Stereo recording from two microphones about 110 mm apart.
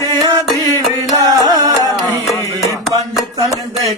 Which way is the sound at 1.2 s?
35° right (ahead or behind).